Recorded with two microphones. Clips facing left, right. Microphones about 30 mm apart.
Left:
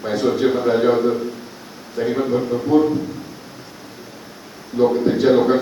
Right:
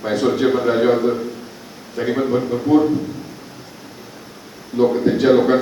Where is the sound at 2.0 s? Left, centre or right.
Centre.